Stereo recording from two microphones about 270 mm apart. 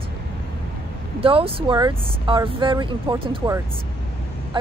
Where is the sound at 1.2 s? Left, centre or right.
Centre.